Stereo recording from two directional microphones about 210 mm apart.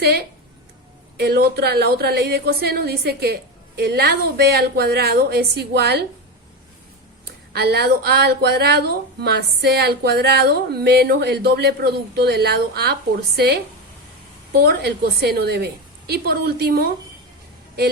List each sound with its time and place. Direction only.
0.0 s a woman's voice: 50° right (ahead or behind)
7.3 s a woman's voice: 50° right (ahead or behind)
14.6 s a woman's voice: 50° right (ahead or behind)